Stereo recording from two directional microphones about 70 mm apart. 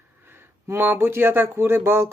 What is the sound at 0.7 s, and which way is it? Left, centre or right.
A woman's voice, right.